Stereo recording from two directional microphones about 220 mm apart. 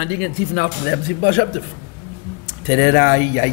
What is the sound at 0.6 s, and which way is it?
Speech, 20° left (ahead or behind).